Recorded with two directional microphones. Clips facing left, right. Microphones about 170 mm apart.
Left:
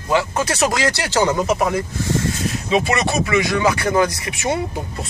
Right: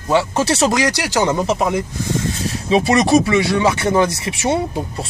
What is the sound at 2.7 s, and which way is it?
Speech, 35° right (ahead or behind).